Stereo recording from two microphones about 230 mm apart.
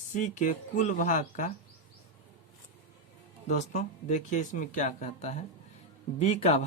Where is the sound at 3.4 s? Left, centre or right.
Left.